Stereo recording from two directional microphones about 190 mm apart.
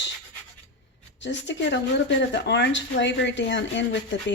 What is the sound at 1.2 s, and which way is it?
Speech, 70° left (ahead or behind).